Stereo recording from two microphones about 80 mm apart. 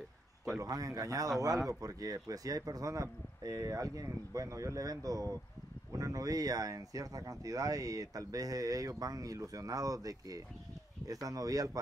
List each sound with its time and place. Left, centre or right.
0.6 s speech: right